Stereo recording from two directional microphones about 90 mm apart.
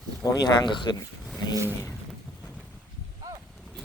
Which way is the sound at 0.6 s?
55° left (ahead or behind).